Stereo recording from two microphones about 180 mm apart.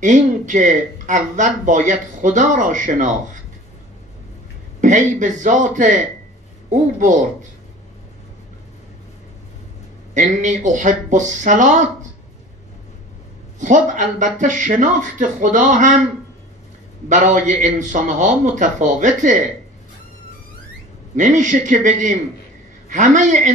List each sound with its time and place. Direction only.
0.0 s speech: 45° right (ahead or behind)
4.8 s speech: 45° right (ahead or behind)
10.1 s speech: 45° right (ahead or behind)
13.6 s speech: 45° right (ahead or behind)
17.1 s speech: 45° right (ahead or behind)
21.2 s speech: 45° right (ahead or behind)